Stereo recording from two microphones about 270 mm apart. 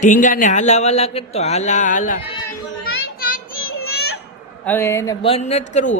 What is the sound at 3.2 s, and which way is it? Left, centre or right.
Child singing, left.